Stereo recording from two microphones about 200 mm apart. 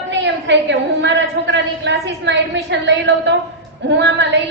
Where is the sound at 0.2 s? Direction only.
65° right (ahead or behind).